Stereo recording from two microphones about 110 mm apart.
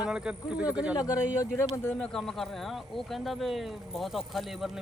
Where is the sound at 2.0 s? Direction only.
5° left (ahead or behind).